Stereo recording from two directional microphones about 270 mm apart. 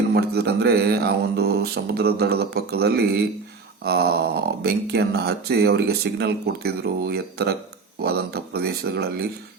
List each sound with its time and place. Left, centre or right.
0.1 s speech: right